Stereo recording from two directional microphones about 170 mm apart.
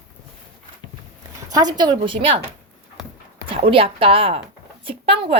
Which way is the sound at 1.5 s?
25° right (ahead or behind).